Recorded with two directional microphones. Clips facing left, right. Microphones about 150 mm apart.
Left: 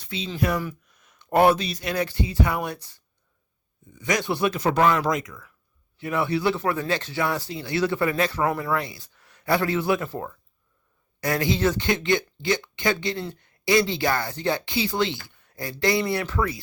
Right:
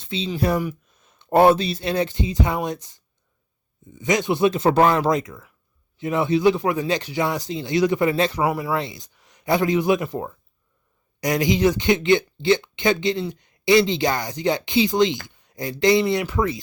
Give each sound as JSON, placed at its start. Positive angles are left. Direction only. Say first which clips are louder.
{"t": 0.0, "sound": "speech", "louder": "right 3 dB", "side_deg": -25}